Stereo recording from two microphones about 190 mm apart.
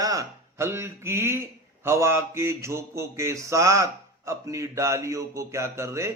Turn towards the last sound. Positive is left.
turn(degrees=-15)  # may be behind; listen again after turning